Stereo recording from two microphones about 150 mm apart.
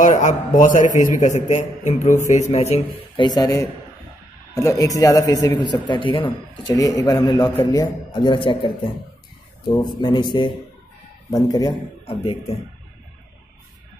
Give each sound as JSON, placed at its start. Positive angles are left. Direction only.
{"t": 0.0, "sound": "a man's voice", "side_deg": 55}
{"t": 0.9, "sound": "a man's voice", "side_deg": -20}
{"t": 1.2, "sound": "a man's voice", "side_deg": 50}
{"t": 3.2, "sound": "a man's voice", "side_deg": 25}
{"t": 6.8, "sound": "a man's voice", "side_deg": 20}
{"t": 12.1, "sound": "a man's voice", "side_deg": 40}